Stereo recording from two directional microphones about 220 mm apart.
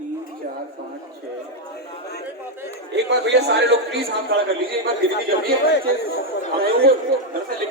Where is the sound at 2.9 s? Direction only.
50° right (ahead or behind).